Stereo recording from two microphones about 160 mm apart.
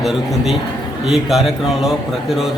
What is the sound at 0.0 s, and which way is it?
Mantra, centre (ahead or behind).